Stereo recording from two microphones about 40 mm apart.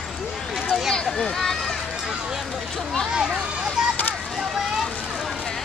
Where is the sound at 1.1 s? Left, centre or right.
Centre.